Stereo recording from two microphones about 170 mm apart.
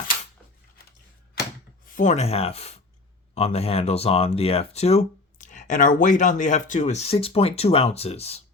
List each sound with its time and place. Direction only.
2.0 s speech: 40° left (ahead or behind)